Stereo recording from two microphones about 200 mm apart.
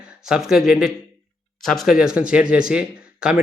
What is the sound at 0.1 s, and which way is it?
Speech, 5° right (ahead or behind).